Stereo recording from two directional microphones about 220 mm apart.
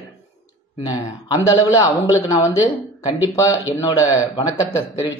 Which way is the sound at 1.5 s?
15° left (ahead or behind).